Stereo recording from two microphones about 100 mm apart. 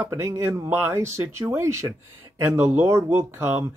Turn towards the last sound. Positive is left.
turn(degrees=-20)  # may be behind; listen again after turning